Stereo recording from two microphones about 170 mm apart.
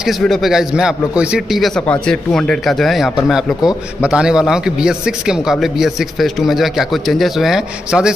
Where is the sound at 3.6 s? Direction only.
20° left (ahead or behind).